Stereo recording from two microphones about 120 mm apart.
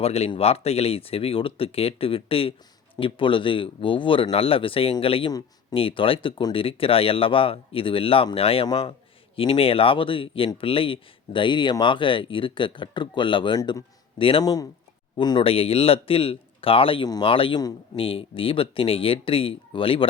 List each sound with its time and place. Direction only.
0.0 s speech: 60° left (ahead or behind)
14.4 s speech: 30° left (ahead or behind)
15.4 s speech: 50° left (ahead or behind)